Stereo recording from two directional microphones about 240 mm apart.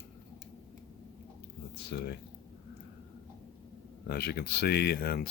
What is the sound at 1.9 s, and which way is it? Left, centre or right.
Speech, left.